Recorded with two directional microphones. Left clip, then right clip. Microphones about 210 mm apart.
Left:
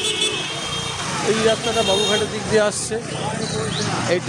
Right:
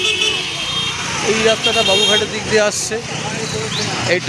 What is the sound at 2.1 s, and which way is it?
Speech, 5° right (ahead or behind).